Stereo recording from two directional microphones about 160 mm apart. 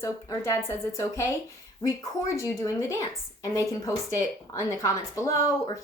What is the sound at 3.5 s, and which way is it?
A woman's voice, 20° left (ahead or behind).